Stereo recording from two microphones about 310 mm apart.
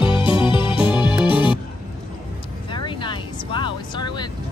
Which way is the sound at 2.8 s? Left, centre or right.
Centre.